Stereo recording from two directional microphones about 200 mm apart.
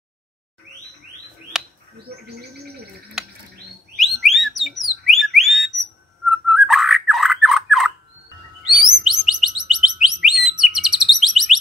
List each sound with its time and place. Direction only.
1.5 s bird: centre (ahead or behind)
2.0 s bird: 50° right (ahead or behind)
4.0 s a sound: centre (ahead or behind)
8.6 s chirp: centre (ahead or behind)